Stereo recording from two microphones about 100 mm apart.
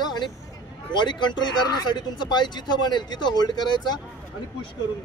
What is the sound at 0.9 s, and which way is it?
Speech, 50° left (ahead or behind).